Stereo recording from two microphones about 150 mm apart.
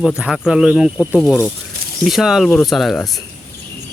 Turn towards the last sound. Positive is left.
turn(degrees=0)  # may be behind; listen again after turning